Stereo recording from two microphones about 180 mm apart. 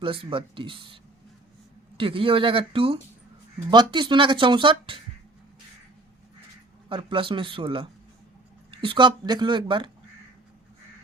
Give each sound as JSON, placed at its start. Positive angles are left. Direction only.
{"t": 0.0, "sound": "speech", "side_deg": -30}
{"t": 2.0, "sound": "speech", "side_deg": -30}
{"t": 6.8, "sound": "speech", "side_deg": -30}